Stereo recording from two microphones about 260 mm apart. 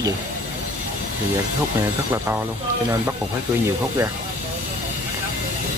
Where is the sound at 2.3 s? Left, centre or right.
Centre.